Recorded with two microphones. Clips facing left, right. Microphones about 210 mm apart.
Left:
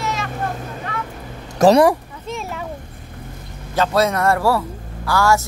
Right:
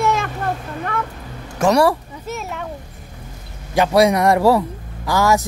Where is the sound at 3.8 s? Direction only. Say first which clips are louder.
Right 3 dB; 15° right (ahead or behind).